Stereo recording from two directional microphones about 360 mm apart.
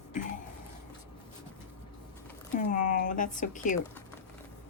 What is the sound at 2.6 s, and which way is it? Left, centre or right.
Speech, left.